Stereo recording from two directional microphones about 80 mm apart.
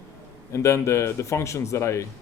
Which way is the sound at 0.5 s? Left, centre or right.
Left.